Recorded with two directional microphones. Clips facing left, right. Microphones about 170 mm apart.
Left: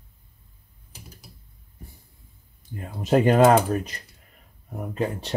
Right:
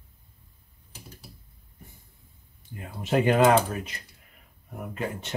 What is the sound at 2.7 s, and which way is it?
Speech, 40° left (ahead or behind).